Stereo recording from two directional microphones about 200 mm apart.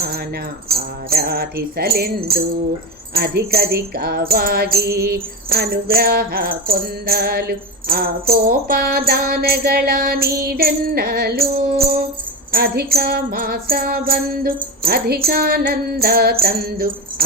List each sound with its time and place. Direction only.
0.7 s music: 50° right (ahead or behind)